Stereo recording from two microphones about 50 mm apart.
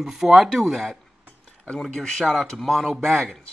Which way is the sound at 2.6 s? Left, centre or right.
Centre.